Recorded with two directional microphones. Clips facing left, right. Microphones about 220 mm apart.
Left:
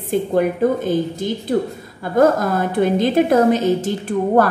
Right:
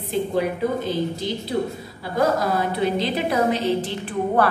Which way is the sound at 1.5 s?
55° left (ahead or behind).